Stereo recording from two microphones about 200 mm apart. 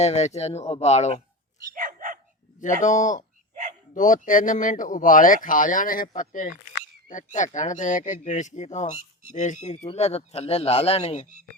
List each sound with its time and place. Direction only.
0.0 s speech: 35° left (ahead or behind)
1.7 s dog: 40° right (ahead or behind)
2.6 s speech: 40° left (ahead or behind)
3.5 s a sound: 40° right (ahead or behind)
3.9 s speech: 40° left (ahead or behind)